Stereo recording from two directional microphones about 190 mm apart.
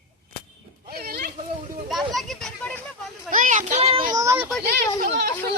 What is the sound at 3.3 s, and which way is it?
Speech, 45° right (ahead or behind).